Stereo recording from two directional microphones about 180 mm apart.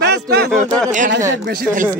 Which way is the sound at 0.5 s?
5° left (ahead or behind).